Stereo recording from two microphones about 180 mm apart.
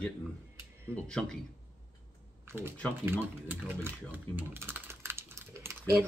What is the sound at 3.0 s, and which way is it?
Speech, 10° right (ahead or behind).